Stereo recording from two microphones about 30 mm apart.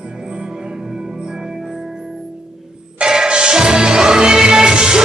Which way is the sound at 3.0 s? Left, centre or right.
Right.